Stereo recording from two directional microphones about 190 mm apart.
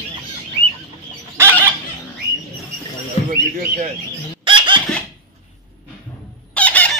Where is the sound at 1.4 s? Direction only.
15° right (ahead or behind).